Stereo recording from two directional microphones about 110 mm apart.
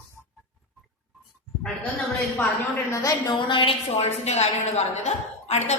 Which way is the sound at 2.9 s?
30° left (ahead or behind).